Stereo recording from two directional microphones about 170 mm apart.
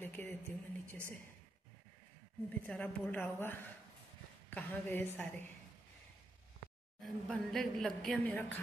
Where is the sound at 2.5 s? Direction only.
10° left (ahead or behind).